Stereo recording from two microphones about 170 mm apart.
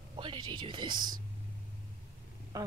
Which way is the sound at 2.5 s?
20° right (ahead or behind).